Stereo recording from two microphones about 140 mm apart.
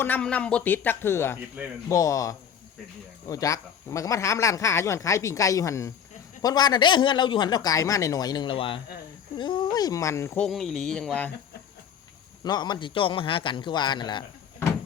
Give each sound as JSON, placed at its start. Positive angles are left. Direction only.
{"t": 0.0, "sound": "speech", "side_deg": 10}
{"t": 1.6, "sound": "speech", "side_deg": -10}
{"t": 1.9, "sound": "a man's voice", "side_deg": 25}
{"t": 10.4, "sound": "speech", "side_deg": 0}
{"t": 12.5, "sound": "a man's voice", "side_deg": 30}